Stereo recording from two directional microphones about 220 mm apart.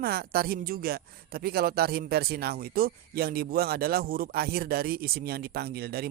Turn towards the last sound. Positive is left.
turn(degrees=-45)  # may be behind; listen again after turning